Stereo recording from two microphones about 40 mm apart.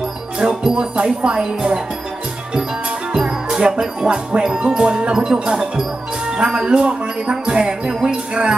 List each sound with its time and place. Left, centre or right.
0.4 s music: right
3.1 s music: centre